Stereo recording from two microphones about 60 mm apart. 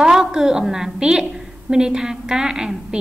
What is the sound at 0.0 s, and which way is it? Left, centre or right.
A woman's voice, centre.